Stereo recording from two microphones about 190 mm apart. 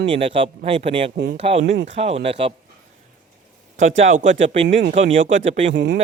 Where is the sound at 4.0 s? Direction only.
40° right (ahead or behind).